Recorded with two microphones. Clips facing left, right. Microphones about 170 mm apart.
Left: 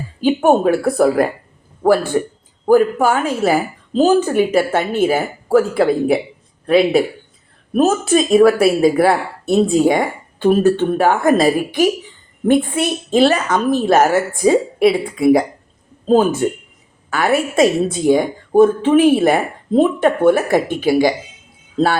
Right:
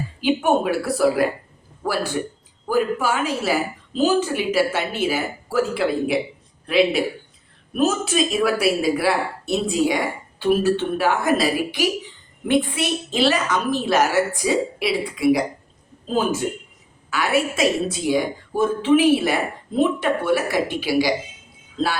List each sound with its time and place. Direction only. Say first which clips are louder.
0.2 s speech: left 6 dB; 45° left (ahead or behind)
17.1 s speech: left 4 dB; 50° left (ahead or behind)